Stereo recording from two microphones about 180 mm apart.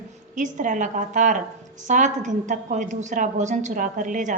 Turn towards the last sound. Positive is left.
turn(degrees=-45)  # may be behind; listen again after turning